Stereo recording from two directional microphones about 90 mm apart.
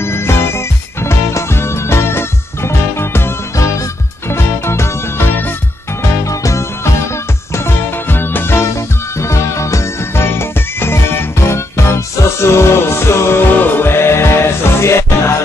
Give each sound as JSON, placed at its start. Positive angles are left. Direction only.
{"t": 0.0, "sound": "music", "side_deg": 30}